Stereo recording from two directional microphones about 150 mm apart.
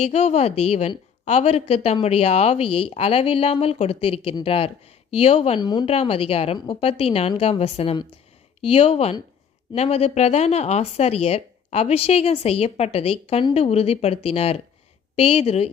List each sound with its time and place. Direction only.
0.0 s a woman's voice: 45° left (ahead or behind)
5.5 s speech: 30° left (ahead or behind)
5.8 s a woman's voice: 45° left (ahead or behind)